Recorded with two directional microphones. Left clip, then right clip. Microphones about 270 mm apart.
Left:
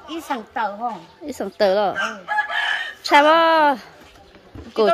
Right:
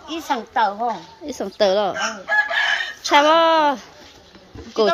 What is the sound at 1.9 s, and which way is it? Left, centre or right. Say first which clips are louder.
Chicken: right 2 dB; left.